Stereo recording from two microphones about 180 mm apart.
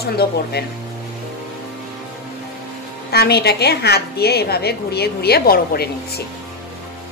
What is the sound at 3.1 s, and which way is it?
A woman's voice, 65° left (ahead or behind).